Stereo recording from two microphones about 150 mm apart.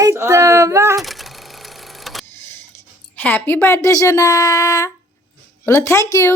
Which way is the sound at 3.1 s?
10° left (ahead or behind).